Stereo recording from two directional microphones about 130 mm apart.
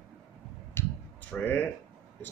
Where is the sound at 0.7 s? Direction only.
10° left (ahead or behind).